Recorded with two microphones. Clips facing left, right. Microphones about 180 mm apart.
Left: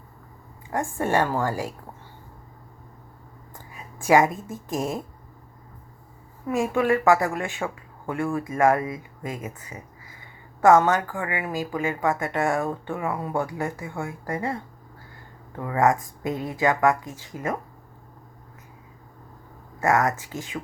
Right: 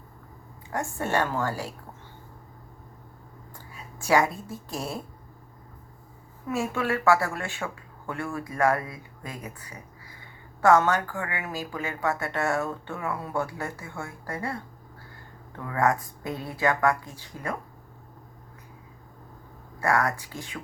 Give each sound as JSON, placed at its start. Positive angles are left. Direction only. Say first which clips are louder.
{"t": 0.7, "sound": "speech", "louder": "left 4 dB", "side_deg": 10}
{"t": 3.9, "sound": "a woman's voice", "louder": "left 4 dB", "side_deg": 15}
{"t": 6.5, "sound": "speech", "louder": "left 6 dB", "side_deg": 15}
{"t": 10.6, "sound": "speech", "louder": "left 3 dB", "side_deg": 15}
{"t": 15.6, "sound": "speech", "louder": "left 4 dB", "side_deg": 15}
{"t": 19.8, "sound": "speech", "louder": "left 3 dB", "side_deg": 20}